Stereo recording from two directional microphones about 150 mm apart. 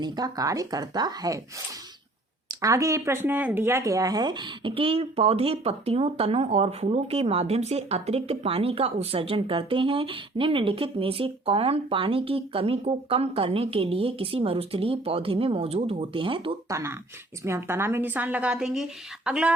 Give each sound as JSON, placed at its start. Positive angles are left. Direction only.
{"t": 0.0, "sound": "speech", "side_deg": -25}
{"t": 2.5, "sound": "speech", "side_deg": -20}
{"t": 16.6, "sound": "a woman's voice", "side_deg": -20}